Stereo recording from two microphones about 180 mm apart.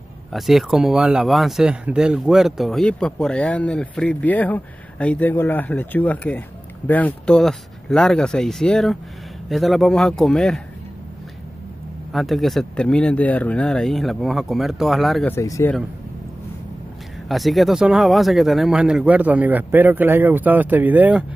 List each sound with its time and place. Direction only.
0.3 s speech: centre (ahead or behind)
12.1 s speech: centre (ahead or behind)
15.3 s speech: 15° left (ahead or behind)
17.3 s speech: centre (ahead or behind)